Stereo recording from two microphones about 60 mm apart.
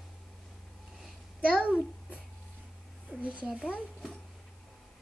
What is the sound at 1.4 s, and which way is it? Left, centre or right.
Babbling, centre.